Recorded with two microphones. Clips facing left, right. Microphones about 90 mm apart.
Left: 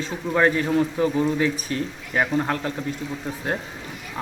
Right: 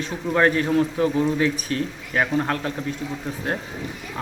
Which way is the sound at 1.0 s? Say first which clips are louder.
Right 1 dB; 15° left (ahead or behind).